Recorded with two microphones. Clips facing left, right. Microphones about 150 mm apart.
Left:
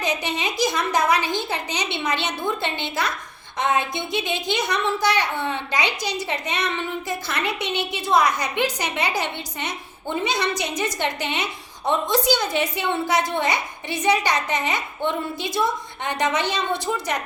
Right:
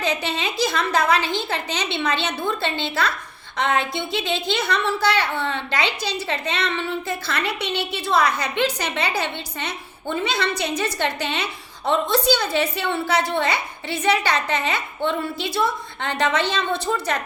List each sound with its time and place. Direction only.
0.0 s a woman's voice: 15° left (ahead or behind)